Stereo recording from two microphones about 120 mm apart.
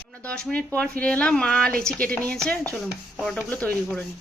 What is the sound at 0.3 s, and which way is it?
Speech, 10° left (ahead or behind).